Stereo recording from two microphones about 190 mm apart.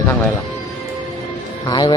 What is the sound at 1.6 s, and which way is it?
Speech, 25° left (ahead or behind).